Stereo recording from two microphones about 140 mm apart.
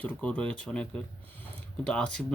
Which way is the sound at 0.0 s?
10° left (ahead or behind).